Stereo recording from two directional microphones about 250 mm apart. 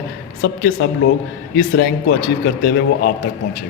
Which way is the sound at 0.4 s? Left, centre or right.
Left.